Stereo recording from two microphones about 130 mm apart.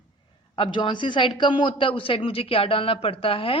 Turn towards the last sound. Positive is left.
turn(degrees=45)  # may be behind; listen again after turning